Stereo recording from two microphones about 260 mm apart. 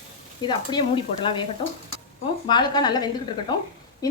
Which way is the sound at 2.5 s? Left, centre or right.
Centre.